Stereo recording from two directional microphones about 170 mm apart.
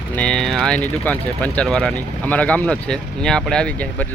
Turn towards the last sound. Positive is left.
turn(degrees=10)  # may be behind; listen again after turning